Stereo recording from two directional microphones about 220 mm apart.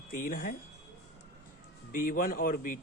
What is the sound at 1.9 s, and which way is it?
Speech, 40° left (ahead or behind).